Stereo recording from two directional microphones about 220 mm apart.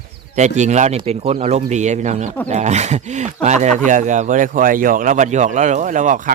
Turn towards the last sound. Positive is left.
turn(degrees=-35)  # may be behind; listen again after turning